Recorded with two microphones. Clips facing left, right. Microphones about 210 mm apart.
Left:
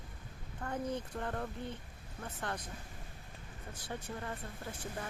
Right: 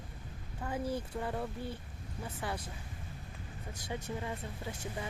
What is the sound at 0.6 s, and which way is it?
Speech, 5° right (ahead or behind).